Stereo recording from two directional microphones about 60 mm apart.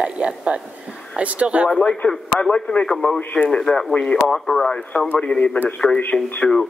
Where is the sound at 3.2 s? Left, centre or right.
Left.